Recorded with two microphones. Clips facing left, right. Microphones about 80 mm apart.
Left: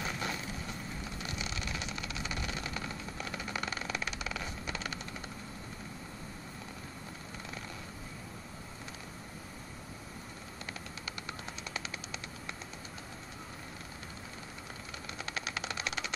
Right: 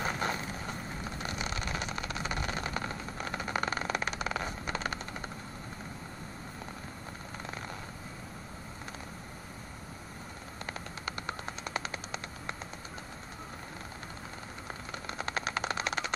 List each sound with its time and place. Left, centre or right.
0.0 s vehicle: right
10.7 s vehicle: right
15.0 s a sound: right